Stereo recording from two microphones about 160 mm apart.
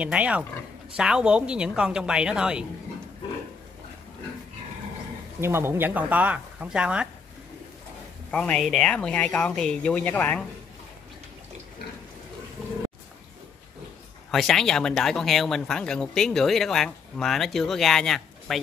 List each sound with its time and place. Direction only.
0.0 s speech: 10° right (ahead or behind)
5.4 s speech: 15° right (ahead or behind)
8.3 s speech: 5° left (ahead or behind)
14.3 s speech: centre (ahead or behind)